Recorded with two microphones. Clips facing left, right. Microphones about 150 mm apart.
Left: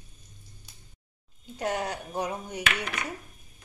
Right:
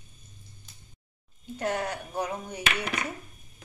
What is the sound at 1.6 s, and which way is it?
Speech, 15° left (ahead or behind).